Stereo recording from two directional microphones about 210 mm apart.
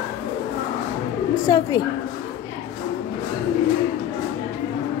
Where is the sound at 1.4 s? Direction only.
20° left (ahead or behind).